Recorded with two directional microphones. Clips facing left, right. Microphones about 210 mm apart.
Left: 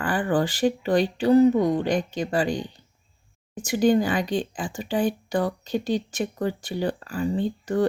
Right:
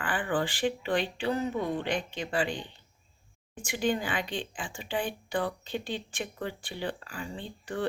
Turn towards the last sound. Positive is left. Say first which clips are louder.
# left 11 dB
turn(degrees=40)  # may be behind; listen again after turning